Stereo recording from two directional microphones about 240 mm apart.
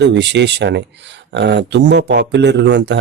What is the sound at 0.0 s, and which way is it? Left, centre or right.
Speech, right.